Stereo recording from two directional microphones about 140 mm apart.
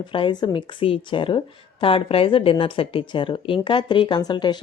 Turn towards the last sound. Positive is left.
turn(degrees=30)  # may be behind; listen again after turning